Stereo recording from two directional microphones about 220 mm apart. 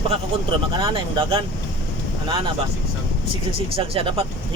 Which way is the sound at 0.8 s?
20° right (ahead or behind).